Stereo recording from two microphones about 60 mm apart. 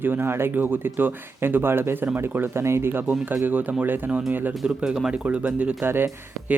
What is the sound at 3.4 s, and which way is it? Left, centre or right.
Speech, right.